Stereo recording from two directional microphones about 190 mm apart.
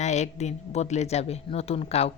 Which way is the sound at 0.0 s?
35° left (ahead or behind).